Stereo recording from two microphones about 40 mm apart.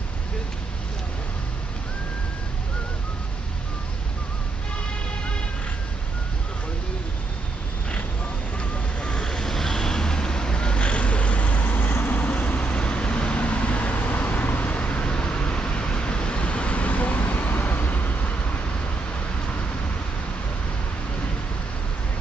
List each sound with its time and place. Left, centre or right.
8.5 s vehicle: left